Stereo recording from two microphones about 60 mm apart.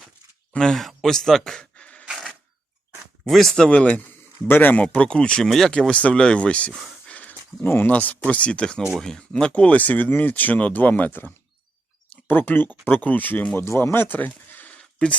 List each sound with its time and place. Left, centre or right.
0.6 s a sound: centre
3.2 s speech: centre
3.7 s speech: left
4.4 s speech: left
4.8 s speech: centre
5.5 s speech: centre
5.7 s speech: centre
12.3 s speech: left
13.6 s speech: left
14.7 s a sound: centre